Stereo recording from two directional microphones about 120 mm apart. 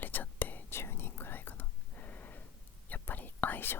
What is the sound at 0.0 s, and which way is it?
Whispering, 15° left (ahead or behind).